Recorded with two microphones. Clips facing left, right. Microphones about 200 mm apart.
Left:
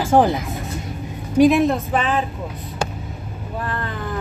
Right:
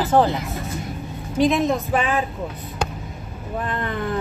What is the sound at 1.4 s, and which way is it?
Speech, 5° left (ahead or behind).